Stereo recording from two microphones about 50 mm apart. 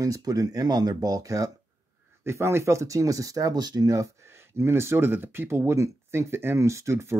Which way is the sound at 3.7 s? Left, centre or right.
Right.